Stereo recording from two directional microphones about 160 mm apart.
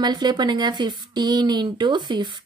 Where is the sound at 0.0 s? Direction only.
25° right (ahead or behind).